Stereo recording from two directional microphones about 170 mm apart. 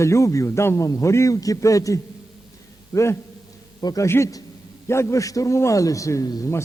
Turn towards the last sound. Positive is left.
turn(degrees=20)  # may be behind; listen again after turning